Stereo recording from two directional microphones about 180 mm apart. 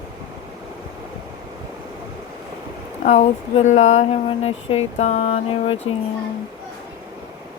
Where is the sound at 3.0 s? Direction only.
40° left (ahead or behind).